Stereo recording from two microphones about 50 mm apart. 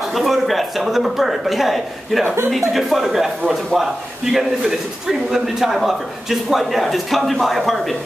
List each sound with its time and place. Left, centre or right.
0.1 s speech: centre
2.2 s speech: right
2.7 s speech: centre